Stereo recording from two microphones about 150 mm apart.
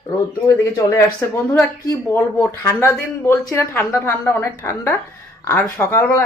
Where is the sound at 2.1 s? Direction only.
10° left (ahead or behind).